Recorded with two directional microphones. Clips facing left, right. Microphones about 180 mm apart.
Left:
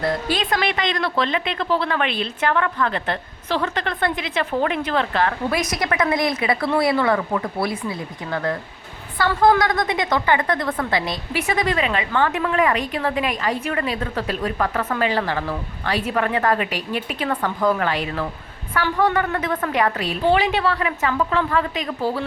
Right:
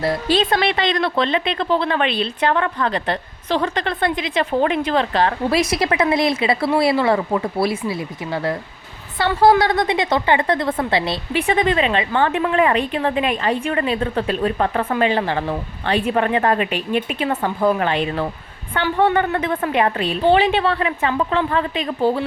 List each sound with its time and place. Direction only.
0.3 s a woman's voice: 30° right (ahead or behind)
8.3 s speech: 15° right (ahead or behind)
9.1 s a woman's voice: 30° right (ahead or behind)